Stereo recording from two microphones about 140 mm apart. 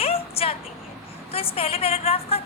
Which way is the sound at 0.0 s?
45° left (ahead or behind).